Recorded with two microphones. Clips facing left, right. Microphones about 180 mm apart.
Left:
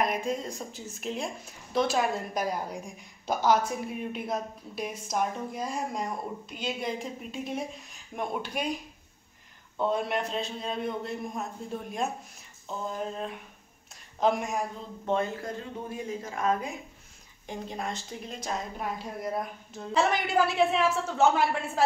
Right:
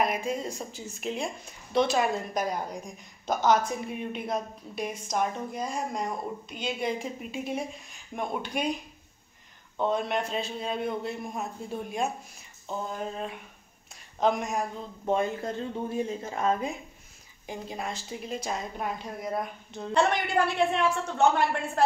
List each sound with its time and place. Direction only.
0.0 s a woman's voice: centre (ahead or behind)
9.8 s a woman's voice: 5° left (ahead or behind)
15.4 s speech: 25° right (ahead or behind)
17.5 s a woman's voice: 5° right (ahead or behind)